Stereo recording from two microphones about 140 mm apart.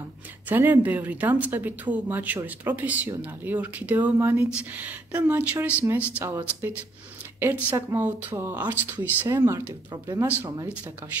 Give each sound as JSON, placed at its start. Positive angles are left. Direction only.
{"t": 0.5, "sound": "a woman's voice", "side_deg": -15}